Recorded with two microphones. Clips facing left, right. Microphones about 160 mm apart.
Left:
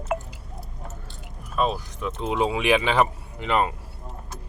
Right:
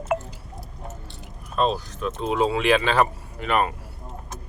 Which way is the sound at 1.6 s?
10° left (ahead or behind).